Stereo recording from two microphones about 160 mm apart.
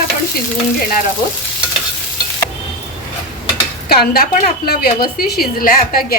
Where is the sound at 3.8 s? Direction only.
75° left (ahead or behind).